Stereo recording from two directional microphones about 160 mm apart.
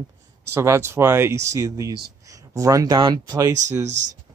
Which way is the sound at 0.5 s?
15° right (ahead or behind).